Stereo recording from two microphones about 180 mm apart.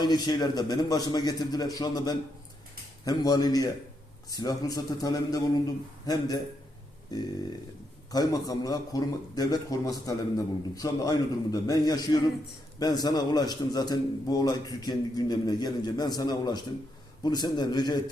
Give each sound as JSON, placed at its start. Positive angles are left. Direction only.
{"t": 0.0, "sound": "a man's voice", "side_deg": 20}